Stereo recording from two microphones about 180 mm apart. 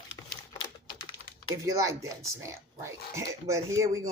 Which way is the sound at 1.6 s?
15° right (ahead or behind).